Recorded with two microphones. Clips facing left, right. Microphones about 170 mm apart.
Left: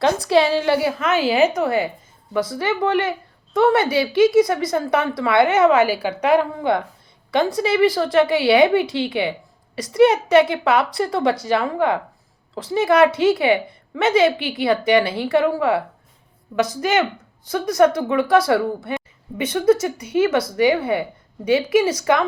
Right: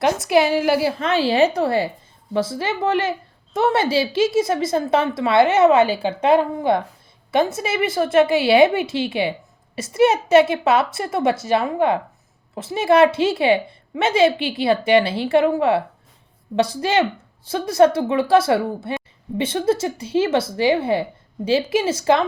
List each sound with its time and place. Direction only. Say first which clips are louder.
0.3 s a woman's voice: right 1 dB; 30° left (ahead or behind)
0.8 s a woman's voice: even; 30° right (ahead or behind)